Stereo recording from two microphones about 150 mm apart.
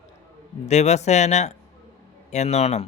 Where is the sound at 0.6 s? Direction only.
50° left (ahead or behind).